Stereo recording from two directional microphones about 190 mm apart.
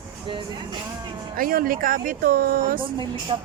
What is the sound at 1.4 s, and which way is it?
Speech, 50° right (ahead or behind).